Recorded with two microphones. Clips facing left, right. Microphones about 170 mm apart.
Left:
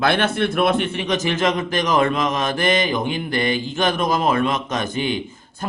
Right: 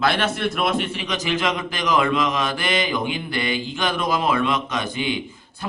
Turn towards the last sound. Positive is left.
turn(degrees=45)  # may be behind; listen again after turning